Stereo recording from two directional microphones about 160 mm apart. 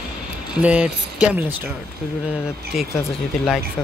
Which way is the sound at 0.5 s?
5° right (ahead or behind).